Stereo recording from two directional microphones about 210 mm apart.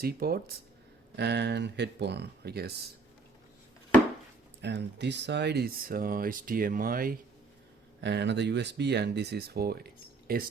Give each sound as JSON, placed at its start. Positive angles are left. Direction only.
{"t": 0.0, "sound": "speech", "side_deg": -45}
{"t": 4.6, "sound": "speech", "side_deg": -55}
{"t": 8.0, "sound": "speech", "side_deg": -55}